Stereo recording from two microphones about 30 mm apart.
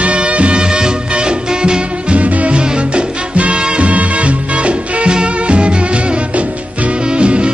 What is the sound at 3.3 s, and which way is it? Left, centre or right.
Music, right.